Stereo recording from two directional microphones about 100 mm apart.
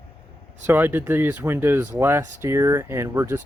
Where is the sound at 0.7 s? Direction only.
20° right (ahead or behind).